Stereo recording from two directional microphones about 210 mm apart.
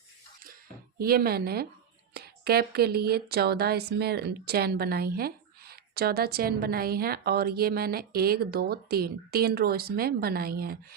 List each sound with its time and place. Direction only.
0.9 s speech: 45° right (ahead or behind)